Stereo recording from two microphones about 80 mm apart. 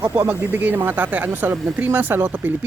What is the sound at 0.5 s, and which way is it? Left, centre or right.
Speech, right.